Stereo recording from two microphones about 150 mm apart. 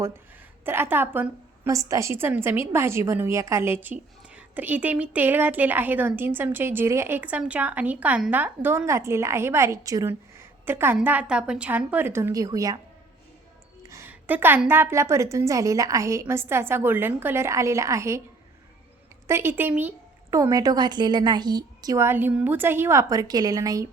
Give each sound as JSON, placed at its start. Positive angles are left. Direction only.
{"t": 0.6, "sound": "a woman's voice", "side_deg": -15}
{"t": 13.8, "sound": "a woman's voice", "side_deg": -20}
{"t": 19.3, "sound": "a woman's voice", "side_deg": -15}